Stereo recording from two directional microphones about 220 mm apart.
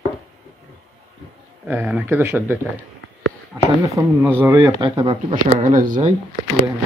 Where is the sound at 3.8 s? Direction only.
15° right (ahead or behind); by 6.1 s 35° right (ahead or behind).